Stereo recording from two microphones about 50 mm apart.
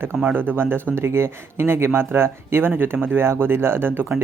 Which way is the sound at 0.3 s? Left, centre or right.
Right.